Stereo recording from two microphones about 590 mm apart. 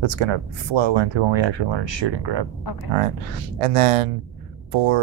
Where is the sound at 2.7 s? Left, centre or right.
Left.